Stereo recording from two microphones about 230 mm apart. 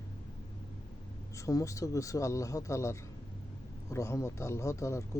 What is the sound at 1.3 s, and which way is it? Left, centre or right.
Speech, centre.